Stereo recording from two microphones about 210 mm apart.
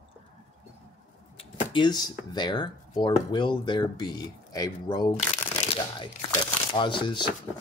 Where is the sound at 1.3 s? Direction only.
20° left (ahead or behind).